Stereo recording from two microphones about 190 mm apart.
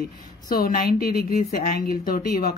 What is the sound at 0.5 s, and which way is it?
Speech, 50° left (ahead or behind).